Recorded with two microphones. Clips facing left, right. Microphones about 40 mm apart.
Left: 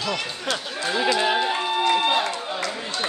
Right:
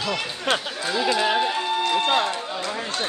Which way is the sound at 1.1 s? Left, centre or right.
Centre.